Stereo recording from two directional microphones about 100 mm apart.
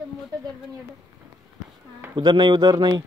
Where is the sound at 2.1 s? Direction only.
50° right (ahead or behind).